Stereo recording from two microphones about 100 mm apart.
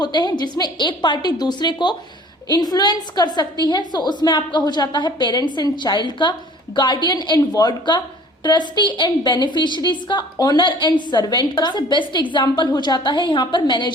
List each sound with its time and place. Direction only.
0.0 s a woman's voice: 45° left (ahead or behind)